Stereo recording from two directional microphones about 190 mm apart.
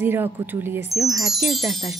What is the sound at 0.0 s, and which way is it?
Speech, 10° right (ahead or behind).